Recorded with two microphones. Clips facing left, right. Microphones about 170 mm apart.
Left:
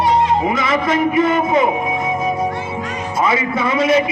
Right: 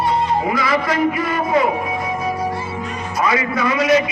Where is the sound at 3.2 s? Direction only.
25° left (ahead or behind).